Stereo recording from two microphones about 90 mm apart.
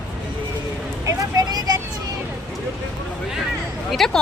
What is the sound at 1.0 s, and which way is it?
Vehicle, 45° right (ahead or behind).